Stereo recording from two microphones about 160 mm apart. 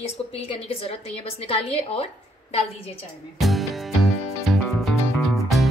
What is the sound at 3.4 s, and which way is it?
Music, centre (ahead or behind).